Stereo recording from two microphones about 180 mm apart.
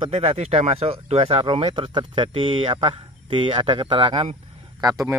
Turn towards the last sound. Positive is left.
turn(degrees=-20)  # may be behind; listen again after turning